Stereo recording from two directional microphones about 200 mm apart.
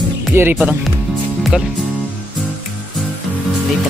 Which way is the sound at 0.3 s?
10° right (ahead or behind).